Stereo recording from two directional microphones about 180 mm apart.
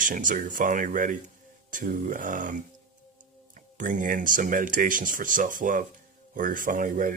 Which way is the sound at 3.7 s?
45° right (ahead or behind).